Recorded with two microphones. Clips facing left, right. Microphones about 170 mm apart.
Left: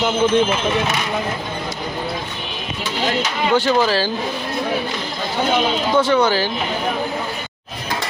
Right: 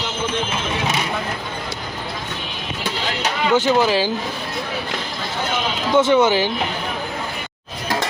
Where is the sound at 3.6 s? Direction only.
15° right (ahead or behind).